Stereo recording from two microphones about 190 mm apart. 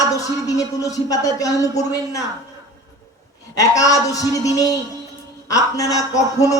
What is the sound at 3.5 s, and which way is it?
Speech, 15° left (ahead or behind).